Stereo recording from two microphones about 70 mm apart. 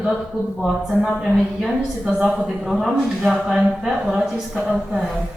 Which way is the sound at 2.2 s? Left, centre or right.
Centre.